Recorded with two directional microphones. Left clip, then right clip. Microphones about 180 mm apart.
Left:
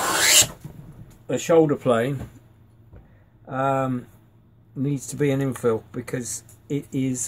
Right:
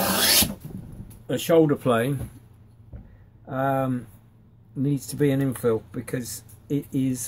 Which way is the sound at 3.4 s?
Centre (ahead or behind).